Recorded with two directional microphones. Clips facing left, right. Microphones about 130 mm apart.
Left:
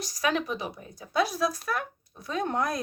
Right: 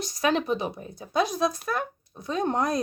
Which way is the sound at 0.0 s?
25° right (ahead or behind).